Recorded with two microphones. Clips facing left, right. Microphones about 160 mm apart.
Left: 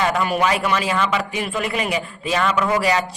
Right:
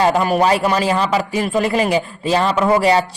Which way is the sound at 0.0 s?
35° right (ahead or behind).